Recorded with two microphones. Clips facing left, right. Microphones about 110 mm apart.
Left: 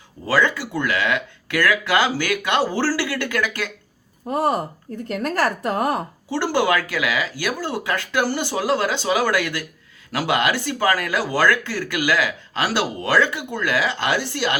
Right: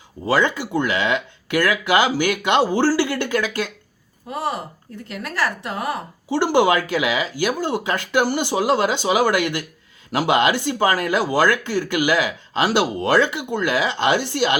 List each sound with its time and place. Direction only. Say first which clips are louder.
0.3 s speech: right 1 dB; 20° right (ahead or behind)
4.3 s a woman's voice: left 5 dB; 45° left (ahead or behind)
6.3 s speech: right 3 dB; 20° right (ahead or behind)